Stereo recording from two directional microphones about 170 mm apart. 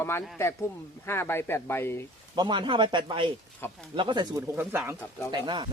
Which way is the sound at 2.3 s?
25° right (ahead or behind).